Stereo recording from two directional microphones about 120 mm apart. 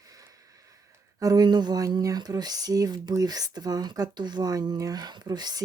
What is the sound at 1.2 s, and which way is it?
Speech, 35° right (ahead or behind).